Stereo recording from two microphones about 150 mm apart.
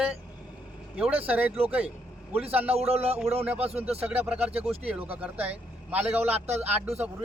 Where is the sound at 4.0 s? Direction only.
10° right (ahead or behind).